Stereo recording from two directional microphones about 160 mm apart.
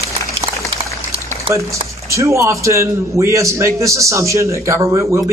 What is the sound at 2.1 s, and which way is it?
Speech, 20° right (ahead or behind).